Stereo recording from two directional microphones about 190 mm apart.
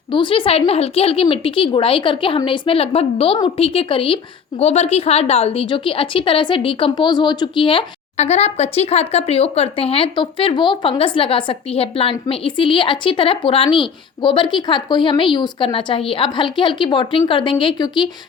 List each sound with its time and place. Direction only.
0.1 s a woman's voice: 25° left (ahead or behind)